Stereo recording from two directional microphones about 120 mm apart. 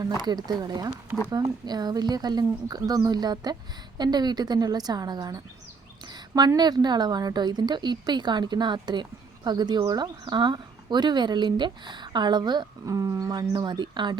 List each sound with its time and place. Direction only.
0.3 s a woman's voice: 35° right (ahead or behind)